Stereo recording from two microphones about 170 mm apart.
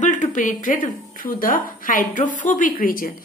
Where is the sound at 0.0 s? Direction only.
45° left (ahead or behind).